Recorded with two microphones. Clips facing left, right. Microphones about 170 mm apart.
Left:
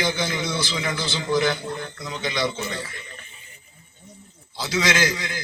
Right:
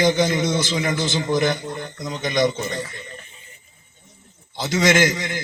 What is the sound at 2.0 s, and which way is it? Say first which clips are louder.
Speech: right 7 dB; 45° right (ahead or behind).